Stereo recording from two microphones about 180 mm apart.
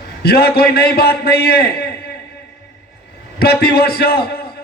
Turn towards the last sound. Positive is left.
turn(degrees=60)  # may be behind; listen again after turning